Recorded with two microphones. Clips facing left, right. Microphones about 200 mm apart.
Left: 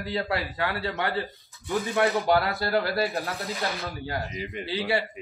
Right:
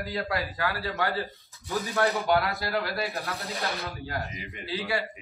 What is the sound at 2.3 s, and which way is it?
Speech, 30° left (ahead or behind).